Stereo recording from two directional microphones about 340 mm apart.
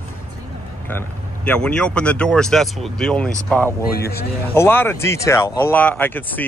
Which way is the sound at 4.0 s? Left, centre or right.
Left.